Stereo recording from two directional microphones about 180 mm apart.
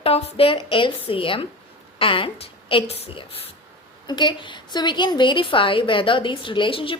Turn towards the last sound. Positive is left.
turn(degrees=30)  # may be behind; listen again after turning